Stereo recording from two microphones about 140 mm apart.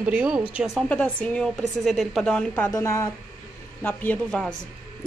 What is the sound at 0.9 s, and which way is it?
A woman's voice, 10° left (ahead or behind).